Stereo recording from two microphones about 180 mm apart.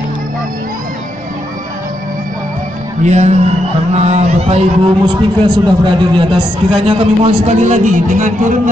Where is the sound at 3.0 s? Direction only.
40° right (ahead or behind).